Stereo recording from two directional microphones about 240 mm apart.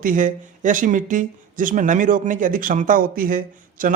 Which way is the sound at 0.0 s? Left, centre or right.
Right.